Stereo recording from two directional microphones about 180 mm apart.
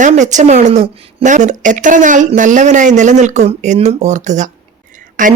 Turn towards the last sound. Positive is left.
turn(degrees=-45)  # may be behind; listen again after turning